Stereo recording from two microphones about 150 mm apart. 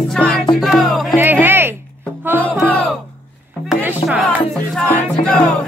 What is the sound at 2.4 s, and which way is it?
Music, 10° left (ahead or behind).